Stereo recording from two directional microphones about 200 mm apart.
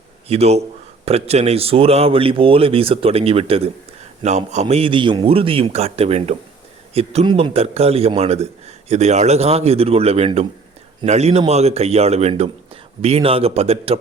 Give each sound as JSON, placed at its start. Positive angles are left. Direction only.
{"t": 0.3, "sound": "a man's voice", "side_deg": -30}